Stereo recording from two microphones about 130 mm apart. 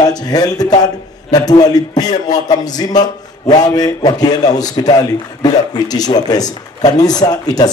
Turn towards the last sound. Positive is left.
turn(degrees=30)  # may be behind; listen again after turning